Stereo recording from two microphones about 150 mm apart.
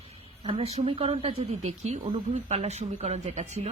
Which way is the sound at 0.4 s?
45° right (ahead or behind).